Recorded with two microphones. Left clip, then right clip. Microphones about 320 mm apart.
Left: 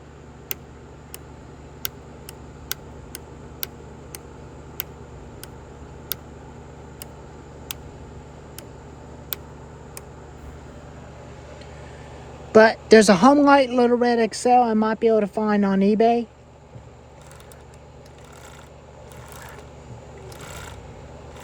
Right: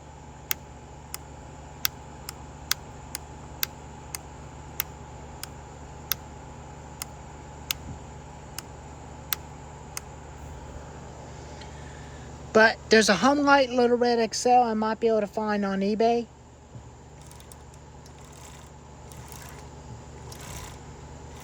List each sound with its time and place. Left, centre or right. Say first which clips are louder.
12.5 s a man's voice: left 6 dB; centre